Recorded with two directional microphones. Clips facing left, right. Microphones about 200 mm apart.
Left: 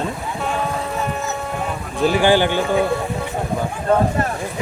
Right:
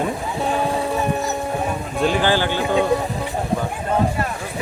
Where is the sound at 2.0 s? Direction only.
10° left (ahead or behind).